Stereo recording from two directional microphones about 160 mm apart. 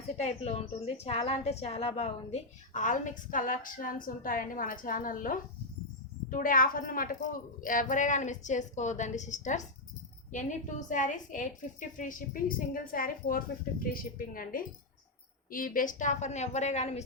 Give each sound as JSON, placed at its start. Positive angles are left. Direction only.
{"t": 0.2, "sound": "a woman's voice", "side_deg": 40}